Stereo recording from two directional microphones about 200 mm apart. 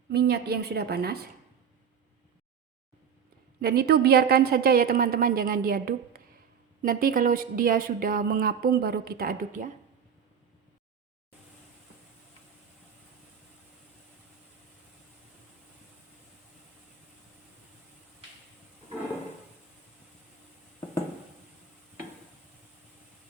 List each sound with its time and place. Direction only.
0.1 s a woman's voice: 55° right (ahead or behind)
3.6 s a woman's voice: 50° right (ahead or behind)